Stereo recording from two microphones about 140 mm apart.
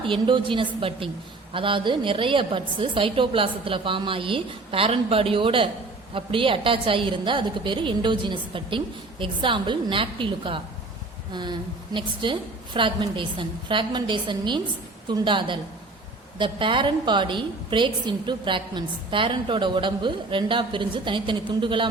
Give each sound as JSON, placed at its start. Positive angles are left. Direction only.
{"t": 0.0, "sound": "a woman's voice", "side_deg": -35}
{"t": 11.9, "sound": "a woman's voice", "side_deg": -35}